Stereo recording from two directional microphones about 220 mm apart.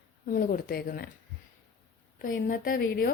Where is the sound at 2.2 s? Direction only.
40° left (ahead or behind).